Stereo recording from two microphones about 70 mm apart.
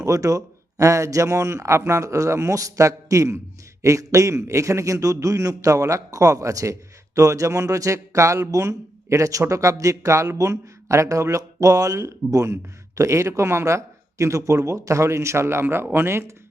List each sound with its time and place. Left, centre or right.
0.0 s speech: right